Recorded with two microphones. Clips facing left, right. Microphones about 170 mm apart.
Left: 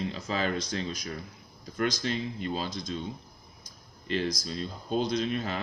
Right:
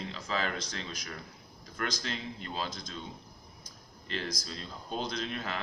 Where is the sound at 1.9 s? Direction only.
15° left (ahead or behind).